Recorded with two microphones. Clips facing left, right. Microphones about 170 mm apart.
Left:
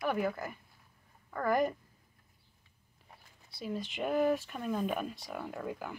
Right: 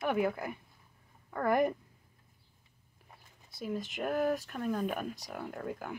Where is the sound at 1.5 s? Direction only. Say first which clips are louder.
Right 1 dB; 60° right (ahead or behind).